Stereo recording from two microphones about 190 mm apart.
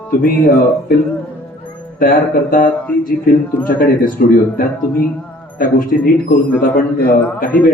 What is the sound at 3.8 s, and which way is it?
Speech, 50° left (ahead or behind).